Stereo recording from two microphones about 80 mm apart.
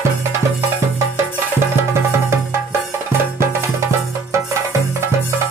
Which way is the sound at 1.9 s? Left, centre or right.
Right.